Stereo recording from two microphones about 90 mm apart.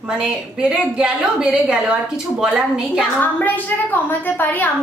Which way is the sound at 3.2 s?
20° left (ahead or behind).